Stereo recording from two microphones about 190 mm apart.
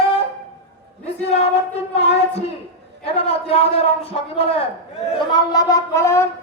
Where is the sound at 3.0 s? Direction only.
30° left (ahead or behind).